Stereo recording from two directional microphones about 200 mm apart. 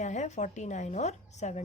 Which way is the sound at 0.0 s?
35° left (ahead or behind).